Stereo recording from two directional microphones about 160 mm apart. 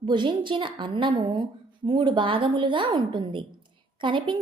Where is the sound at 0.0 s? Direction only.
30° right (ahead or behind).